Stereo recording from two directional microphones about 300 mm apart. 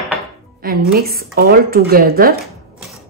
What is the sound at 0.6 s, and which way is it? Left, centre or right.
Speech, right.